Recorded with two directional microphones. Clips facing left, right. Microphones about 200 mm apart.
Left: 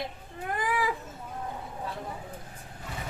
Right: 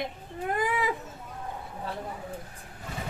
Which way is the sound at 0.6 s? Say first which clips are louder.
Even; 20° right (ahead or behind).